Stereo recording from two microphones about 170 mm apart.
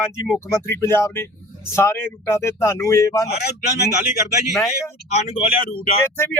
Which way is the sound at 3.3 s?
75° left (ahead or behind).